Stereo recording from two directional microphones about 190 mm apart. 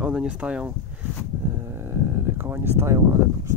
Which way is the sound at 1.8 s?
15° right (ahead or behind).